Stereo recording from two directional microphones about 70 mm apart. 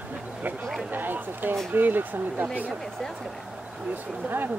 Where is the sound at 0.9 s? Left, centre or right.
Right.